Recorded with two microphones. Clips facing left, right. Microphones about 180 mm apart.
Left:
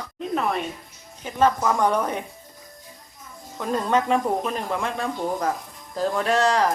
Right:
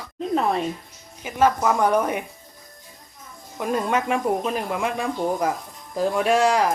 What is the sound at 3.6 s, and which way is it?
Speech, 10° right (ahead or behind).